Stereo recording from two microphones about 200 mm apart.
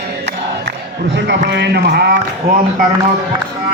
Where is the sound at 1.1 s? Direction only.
60° right (ahead or behind).